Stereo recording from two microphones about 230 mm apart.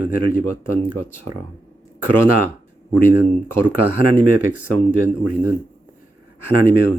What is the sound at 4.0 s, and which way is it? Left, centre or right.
Speech, right.